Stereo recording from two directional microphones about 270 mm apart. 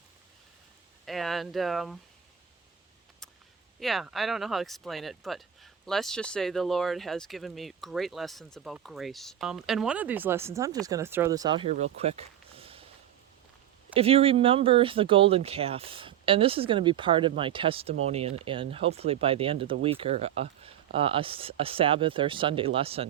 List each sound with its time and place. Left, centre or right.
1.0 s speech: centre
3.8 s speech: centre; by 12.9 s right
13.9 s speech: right